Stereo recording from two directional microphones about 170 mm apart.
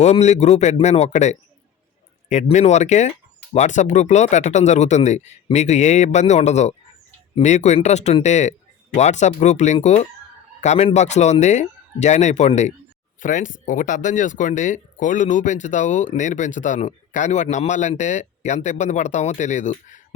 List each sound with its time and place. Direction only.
0.0 s speech: 40° left (ahead or behind)